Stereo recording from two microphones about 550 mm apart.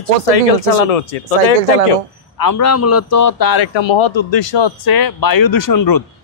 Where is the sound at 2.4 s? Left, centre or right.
Left.